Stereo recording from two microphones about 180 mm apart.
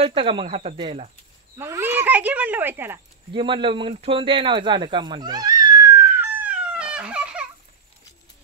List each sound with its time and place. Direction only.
0.0 s speech: 30° right (ahead or behind)
1.6 s speech: 15° right (ahead or behind)
3.3 s a sound: 25° right (ahead or behind); by 7.4 s 5° right (ahead or behind)